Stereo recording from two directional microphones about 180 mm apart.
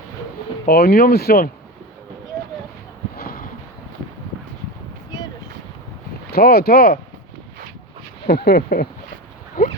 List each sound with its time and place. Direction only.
0.7 s speech: 60° left (ahead or behind)
3.2 s a sound: 55° left (ahead or behind)
6.3 s speech: 60° left (ahead or behind)
8.3 s speech: 60° left (ahead or behind)